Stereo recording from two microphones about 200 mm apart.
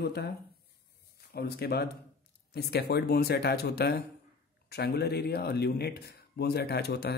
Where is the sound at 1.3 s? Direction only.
55° left (ahead or behind).